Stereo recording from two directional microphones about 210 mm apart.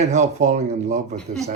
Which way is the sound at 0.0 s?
30° right (ahead or behind).